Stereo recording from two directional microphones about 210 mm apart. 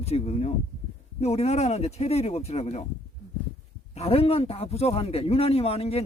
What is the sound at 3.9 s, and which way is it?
Speech, 30° left (ahead or behind).